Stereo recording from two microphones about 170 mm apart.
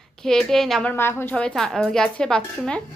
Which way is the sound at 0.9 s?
15° left (ahead or behind).